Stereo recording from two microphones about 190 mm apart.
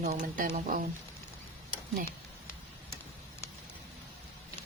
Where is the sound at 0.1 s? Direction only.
40° right (ahead or behind).